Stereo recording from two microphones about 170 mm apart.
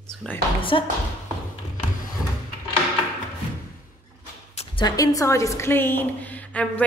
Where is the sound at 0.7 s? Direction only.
30° left (ahead or behind).